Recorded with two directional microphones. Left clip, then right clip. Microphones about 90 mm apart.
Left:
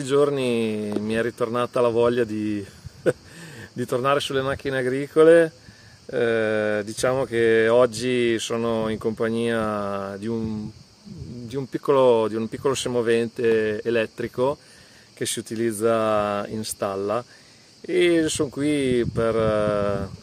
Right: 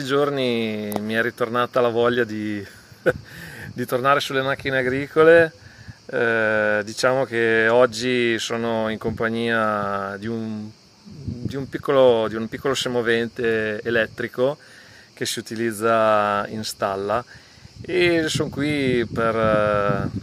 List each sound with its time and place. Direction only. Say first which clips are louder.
0.0 s speech: even; 25° left (ahead or behind)
3.3 s speech: right 2 dB; 35° left (ahead or behind)
11.4 s speech: left 1 dB; 35° left (ahead or behind)